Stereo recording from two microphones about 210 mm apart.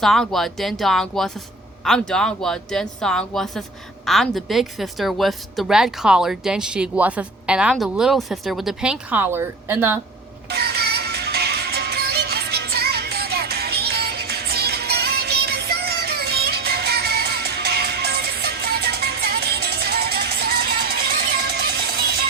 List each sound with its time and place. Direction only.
0.0 s a woman's voice: centre (ahead or behind)
10.5 s music: 50° right (ahead or behind)